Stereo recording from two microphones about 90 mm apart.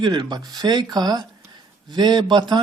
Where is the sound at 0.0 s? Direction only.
55° right (ahead or behind).